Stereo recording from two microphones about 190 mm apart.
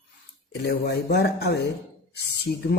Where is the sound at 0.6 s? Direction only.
60° left (ahead or behind).